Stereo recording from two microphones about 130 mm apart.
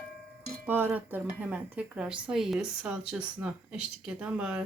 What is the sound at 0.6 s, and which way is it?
Speech, 15° right (ahead or behind).